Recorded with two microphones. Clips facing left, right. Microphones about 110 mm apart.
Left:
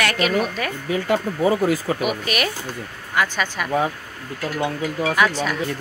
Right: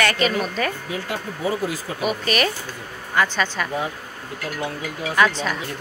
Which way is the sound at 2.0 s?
5° left (ahead or behind).